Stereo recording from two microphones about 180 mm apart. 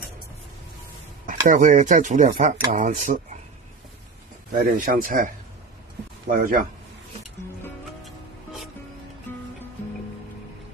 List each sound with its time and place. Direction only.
1.2 s speech: 45° right (ahead or behind)
4.6 s speech: 50° right (ahead or behind)
8.0 s music: centre (ahead or behind)